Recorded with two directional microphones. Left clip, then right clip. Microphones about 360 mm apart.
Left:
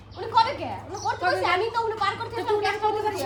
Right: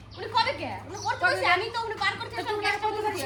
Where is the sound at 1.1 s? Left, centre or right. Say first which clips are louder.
Even; centre.